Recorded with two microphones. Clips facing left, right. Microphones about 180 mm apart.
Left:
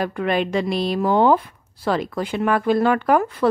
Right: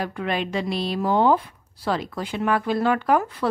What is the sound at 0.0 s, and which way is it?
Speech, 55° left (ahead or behind).